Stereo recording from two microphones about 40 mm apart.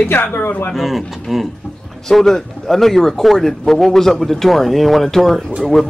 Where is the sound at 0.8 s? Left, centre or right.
Centre.